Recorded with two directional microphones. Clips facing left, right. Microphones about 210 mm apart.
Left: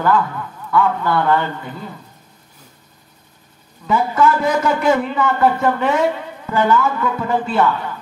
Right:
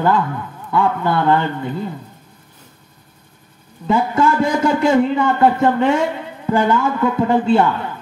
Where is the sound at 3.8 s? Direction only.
25° right (ahead or behind).